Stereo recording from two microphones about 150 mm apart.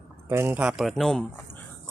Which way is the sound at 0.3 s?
15° right (ahead or behind).